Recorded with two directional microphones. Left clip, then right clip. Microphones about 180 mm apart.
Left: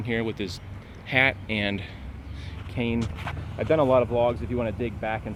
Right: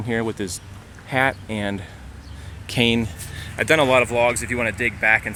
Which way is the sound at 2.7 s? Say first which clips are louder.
Right 10 dB; 55° right (ahead or behind).